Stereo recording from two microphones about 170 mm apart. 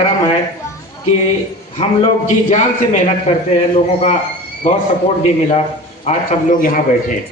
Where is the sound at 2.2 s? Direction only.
45° left (ahead or behind).